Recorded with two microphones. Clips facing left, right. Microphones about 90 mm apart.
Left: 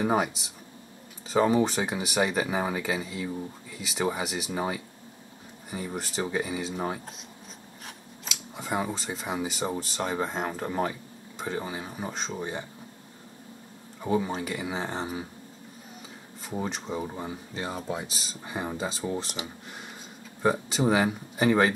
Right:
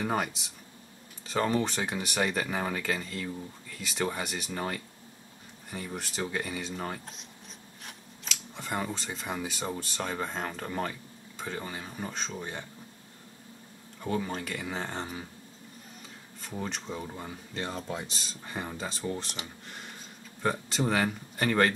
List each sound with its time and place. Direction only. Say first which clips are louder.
0.0 s speech: left 5 dB; 5° left (ahead or behind)
14.0 s speech: left 5 dB; 10° left (ahead or behind)
16.4 s speech: left 4 dB; 5° left (ahead or behind)